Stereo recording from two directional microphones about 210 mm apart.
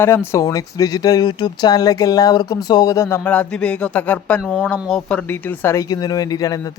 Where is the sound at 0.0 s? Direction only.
10° left (ahead or behind).